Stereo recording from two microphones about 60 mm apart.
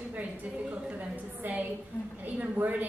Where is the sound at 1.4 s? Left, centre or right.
Right.